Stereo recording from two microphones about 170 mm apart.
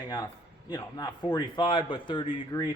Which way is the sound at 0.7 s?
25° left (ahead or behind).